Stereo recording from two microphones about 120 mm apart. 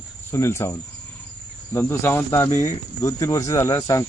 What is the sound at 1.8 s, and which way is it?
Speech, 20° left (ahead or behind).